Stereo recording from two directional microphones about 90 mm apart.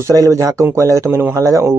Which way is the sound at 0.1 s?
40° right (ahead or behind).